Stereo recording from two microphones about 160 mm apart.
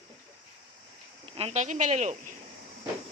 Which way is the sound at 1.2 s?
40° right (ahead or behind).